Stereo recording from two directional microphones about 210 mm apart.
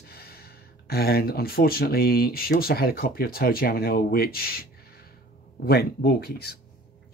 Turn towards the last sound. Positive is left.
turn(degrees=45)  # may be behind; listen again after turning